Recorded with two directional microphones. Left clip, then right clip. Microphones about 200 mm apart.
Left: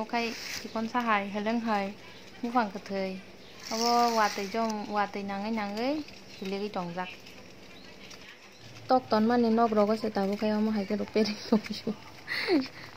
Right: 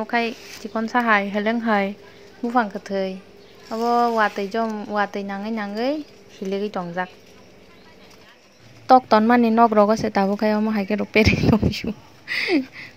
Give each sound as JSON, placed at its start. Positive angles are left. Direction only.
{"t": 0.0, "sound": "speech", "side_deg": -20}
{"t": 8.8, "sound": "speech", "side_deg": -40}